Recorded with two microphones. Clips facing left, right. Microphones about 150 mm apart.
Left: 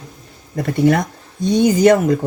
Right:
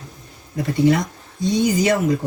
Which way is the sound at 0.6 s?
55° left (ahead or behind).